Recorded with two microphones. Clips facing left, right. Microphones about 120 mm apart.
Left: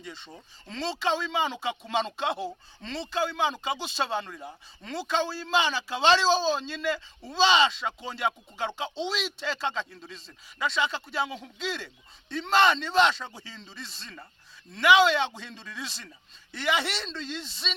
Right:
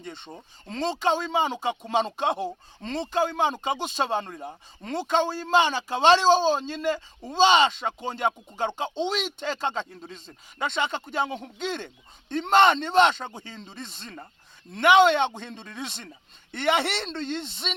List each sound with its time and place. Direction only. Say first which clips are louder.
0.0 s speech: right 3 dB; 55° right (ahead or behind)